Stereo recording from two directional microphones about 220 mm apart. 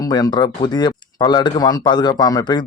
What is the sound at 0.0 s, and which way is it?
Speech, 15° left (ahead or behind).